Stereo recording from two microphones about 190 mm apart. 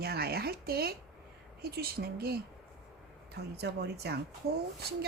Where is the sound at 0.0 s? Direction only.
55° right (ahead or behind).